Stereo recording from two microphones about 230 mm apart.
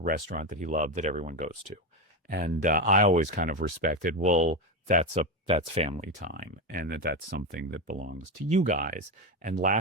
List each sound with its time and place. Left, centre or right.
0.0 s speech: right